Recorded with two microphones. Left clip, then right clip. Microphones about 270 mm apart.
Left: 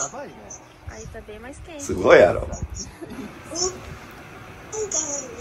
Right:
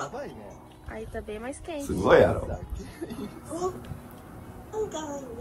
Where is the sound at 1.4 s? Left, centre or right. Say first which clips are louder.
Left 2 dB; centre.